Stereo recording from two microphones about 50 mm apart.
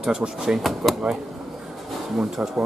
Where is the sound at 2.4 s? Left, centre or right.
Right.